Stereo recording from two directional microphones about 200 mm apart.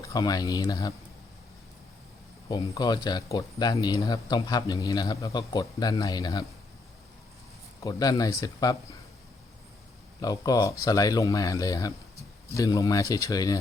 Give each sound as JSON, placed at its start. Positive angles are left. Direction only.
{"t": 0.1, "sound": "speech", "side_deg": 20}
{"t": 2.5, "sound": "speech", "side_deg": 20}
{"t": 7.8, "sound": "speech", "side_deg": 20}
{"t": 10.2, "sound": "speech", "side_deg": 20}